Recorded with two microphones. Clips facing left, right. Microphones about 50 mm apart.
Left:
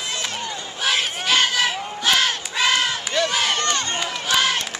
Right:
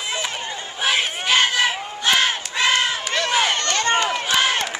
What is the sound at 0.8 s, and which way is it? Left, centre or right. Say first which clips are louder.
Crowd: right 1 dB; centre.